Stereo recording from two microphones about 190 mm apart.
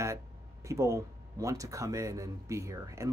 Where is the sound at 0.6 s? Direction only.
15° right (ahead or behind).